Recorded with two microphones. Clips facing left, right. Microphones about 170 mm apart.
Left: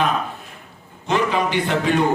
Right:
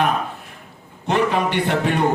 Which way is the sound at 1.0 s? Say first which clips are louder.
Right 1 dB; 60° right (ahead or behind).